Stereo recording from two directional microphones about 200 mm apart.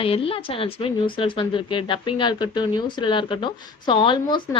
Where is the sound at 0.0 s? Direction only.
30° left (ahead or behind).